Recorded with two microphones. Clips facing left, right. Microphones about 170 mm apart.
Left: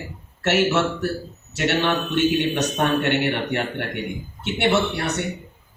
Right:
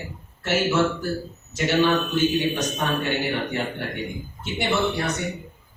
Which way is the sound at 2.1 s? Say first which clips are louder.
Left 2 dB; 70° left (ahead or behind).